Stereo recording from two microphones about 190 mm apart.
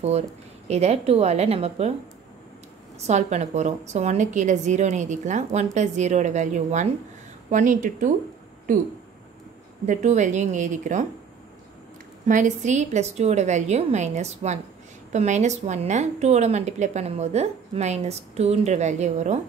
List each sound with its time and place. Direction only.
0.7 s a woman's voice: 35° right (ahead or behind)
3.1 s a woman's voice: 35° right (ahead or behind)
9.8 s a woman's voice: 40° right (ahead or behind)
12.3 s a woman's voice: 40° right (ahead or behind)